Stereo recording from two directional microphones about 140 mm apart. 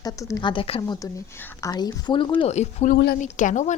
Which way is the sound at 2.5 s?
55° left (ahead or behind).